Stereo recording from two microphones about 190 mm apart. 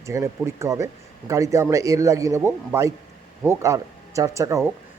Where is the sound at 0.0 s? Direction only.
15° right (ahead or behind).